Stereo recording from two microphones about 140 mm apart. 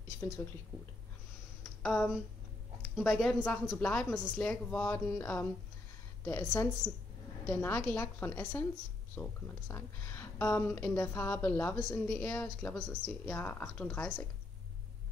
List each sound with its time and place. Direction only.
1.8 s a woman's voice: centre (ahead or behind)